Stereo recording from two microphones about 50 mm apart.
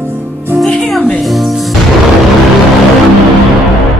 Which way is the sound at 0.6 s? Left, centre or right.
Centre.